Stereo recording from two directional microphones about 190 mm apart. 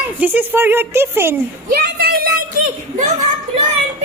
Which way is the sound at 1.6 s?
55° right (ahead or behind).